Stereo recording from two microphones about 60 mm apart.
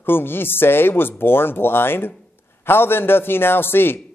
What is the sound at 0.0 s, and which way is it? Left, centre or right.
Speech, left.